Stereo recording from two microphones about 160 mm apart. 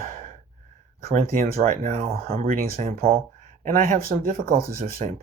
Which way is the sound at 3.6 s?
55° right (ahead or behind).